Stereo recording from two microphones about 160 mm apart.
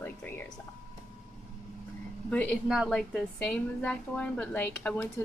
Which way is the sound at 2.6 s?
5° right (ahead or behind).